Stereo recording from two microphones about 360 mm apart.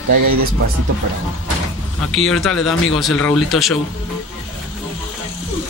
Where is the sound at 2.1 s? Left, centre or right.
Centre.